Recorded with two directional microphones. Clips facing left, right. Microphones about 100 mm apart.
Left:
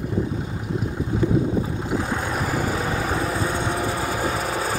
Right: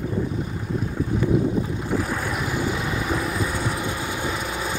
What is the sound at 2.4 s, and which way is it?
Vehicle, 40° left (ahead or behind).